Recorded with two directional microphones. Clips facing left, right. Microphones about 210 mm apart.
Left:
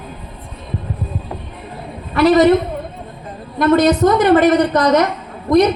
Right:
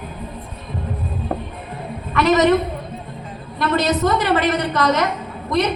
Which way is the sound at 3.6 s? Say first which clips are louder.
Left 7 dB; 50° left (ahead or behind).